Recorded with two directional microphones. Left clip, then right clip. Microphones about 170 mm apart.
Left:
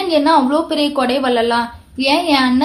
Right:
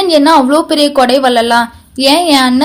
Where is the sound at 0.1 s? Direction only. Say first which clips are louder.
Right 5 dB; 50° right (ahead or behind).